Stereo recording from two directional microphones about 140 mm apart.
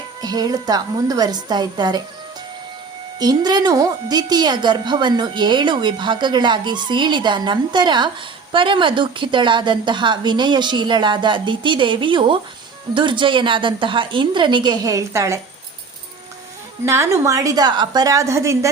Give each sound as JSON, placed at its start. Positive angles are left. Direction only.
{"t": 0.2, "sound": "a woman's voice", "side_deg": -30}
{"t": 3.2, "sound": "a woman's voice", "side_deg": -30}
{"t": 16.8, "sound": "a woman's voice", "side_deg": -20}